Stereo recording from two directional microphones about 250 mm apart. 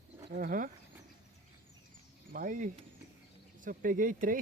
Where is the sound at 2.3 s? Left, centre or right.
Right.